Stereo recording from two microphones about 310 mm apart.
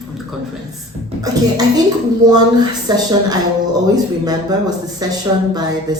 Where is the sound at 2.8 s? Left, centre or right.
Centre.